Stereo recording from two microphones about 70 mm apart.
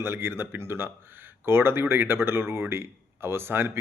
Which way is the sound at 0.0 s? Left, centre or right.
Right.